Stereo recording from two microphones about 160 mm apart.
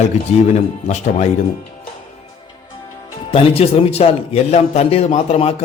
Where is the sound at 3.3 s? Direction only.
40° left (ahead or behind).